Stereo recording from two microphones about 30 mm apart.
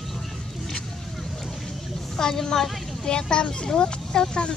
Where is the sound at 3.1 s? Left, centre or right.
Left.